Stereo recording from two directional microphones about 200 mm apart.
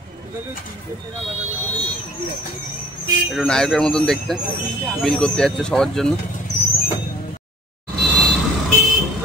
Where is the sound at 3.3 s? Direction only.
Centre (ahead or behind).